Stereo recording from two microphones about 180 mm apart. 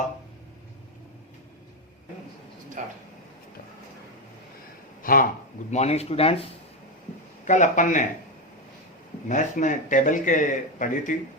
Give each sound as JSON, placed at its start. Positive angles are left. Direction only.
{"t": 2.8, "sound": "speech", "side_deg": -45}
{"t": 5.0, "sound": "speech", "side_deg": 50}
{"t": 5.7, "sound": "speech", "side_deg": 35}
{"t": 7.4, "sound": "speech", "side_deg": 45}
{"t": 9.3, "sound": "speech", "side_deg": 45}